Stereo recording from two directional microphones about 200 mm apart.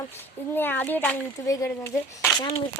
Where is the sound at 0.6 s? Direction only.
10° left (ahead or behind).